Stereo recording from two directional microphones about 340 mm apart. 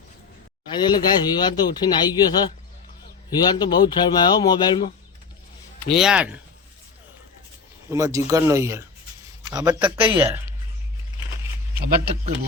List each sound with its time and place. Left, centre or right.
0.7 s speech: centre
5.8 s speech: centre
7.9 s speech: centre